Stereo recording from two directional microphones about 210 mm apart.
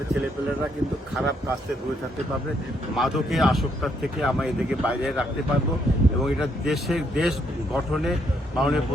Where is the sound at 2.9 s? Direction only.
Centre (ahead or behind).